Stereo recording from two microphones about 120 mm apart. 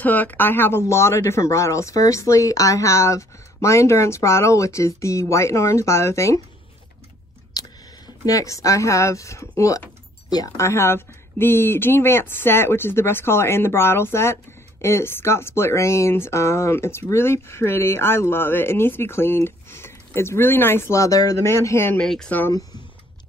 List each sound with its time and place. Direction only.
0.0 s speech: 15° left (ahead or behind)
7.5 s a sound: 35° left (ahead or behind)
8.3 s speech: 25° left (ahead or behind)
21.9 s speech: 5° left (ahead or behind)